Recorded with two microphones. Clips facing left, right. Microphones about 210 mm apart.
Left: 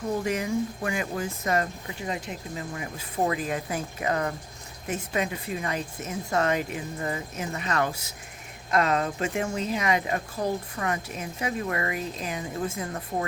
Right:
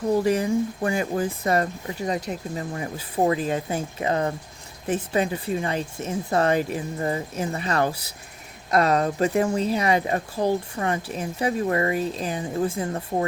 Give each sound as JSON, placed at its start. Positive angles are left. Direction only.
{"t": 0.3, "sound": "speech", "side_deg": -35}